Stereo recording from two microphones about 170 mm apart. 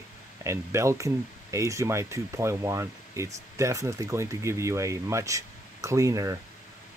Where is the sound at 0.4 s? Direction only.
15° right (ahead or behind).